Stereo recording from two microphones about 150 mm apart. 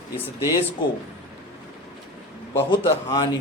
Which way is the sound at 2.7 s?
30° left (ahead or behind).